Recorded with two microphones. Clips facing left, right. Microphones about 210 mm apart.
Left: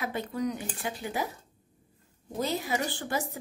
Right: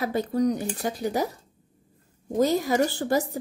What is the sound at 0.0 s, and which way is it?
Speech, 35° right (ahead or behind).